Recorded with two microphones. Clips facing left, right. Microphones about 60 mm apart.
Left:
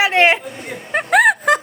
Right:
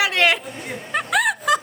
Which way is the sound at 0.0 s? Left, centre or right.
Left.